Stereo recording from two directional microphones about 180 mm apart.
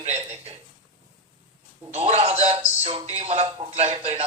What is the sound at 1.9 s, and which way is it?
Speech, 35° right (ahead or behind).